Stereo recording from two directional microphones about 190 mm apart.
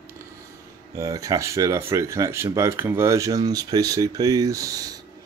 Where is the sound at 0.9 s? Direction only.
15° right (ahead or behind).